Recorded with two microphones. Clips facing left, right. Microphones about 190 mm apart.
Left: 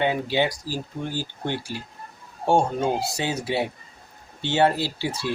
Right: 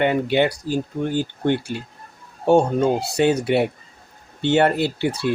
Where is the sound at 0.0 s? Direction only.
60° right (ahead or behind).